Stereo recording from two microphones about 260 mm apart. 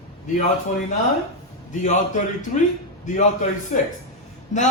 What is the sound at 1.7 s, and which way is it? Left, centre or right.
Speech, left.